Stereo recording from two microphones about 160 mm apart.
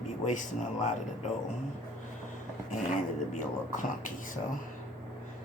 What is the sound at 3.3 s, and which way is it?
Speech, 55° left (ahead or behind).